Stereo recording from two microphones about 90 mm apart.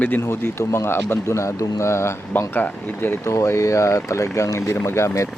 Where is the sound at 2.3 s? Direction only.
20° left (ahead or behind).